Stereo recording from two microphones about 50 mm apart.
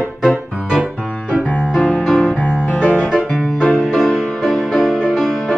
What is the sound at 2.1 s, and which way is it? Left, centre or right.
Music, centre.